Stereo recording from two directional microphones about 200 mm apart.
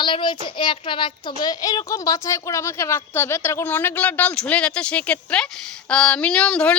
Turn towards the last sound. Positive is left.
turn(degrees=5)  # may be behind; listen again after turning